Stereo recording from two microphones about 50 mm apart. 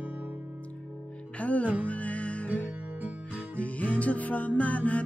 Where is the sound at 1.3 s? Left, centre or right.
Left.